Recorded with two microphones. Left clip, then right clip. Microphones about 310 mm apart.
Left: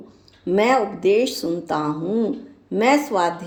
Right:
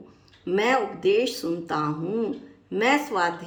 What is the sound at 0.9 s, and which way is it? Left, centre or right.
Speech, centre.